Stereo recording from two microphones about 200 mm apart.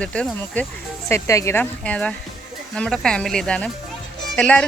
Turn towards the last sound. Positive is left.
turn(degrees=5)  # may be behind; listen again after turning